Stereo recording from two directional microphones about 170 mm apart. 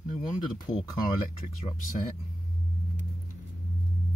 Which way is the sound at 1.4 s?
50° left (ahead or behind).